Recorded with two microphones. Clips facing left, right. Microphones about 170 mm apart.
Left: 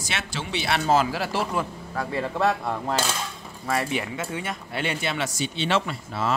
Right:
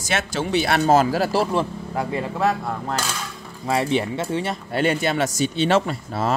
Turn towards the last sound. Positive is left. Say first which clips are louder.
# right 4 dB
turn(degrees=-40)  # may be behind; listen again after turning